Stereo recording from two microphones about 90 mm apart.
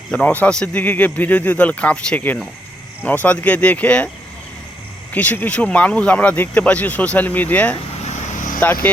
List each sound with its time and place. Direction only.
0.1 s speech: 15° left (ahead or behind)
5.1 s speech: 20° left (ahead or behind)